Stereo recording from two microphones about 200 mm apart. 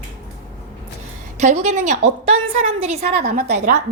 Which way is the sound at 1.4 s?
35° right (ahead or behind).